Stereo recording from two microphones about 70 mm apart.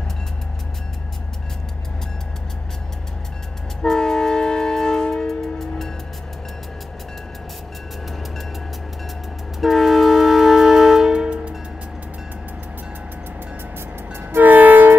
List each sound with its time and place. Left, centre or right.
3.8 s train: centre
9.6 s music: centre
14.3 s train: right